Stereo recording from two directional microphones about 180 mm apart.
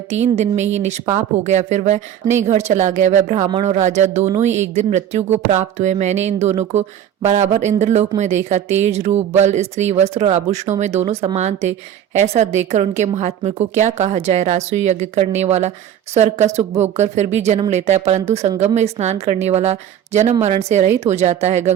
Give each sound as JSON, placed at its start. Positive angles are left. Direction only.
{"t": 0.2, "sound": "speech", "side_deg": -40}